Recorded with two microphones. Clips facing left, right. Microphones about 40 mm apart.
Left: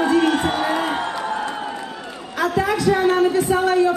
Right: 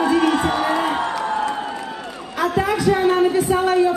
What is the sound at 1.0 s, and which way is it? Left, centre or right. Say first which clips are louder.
Crowd: right 2 dB; left.